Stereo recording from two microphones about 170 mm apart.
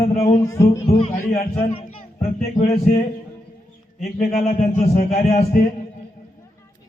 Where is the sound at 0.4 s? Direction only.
20° left (ahead or behind).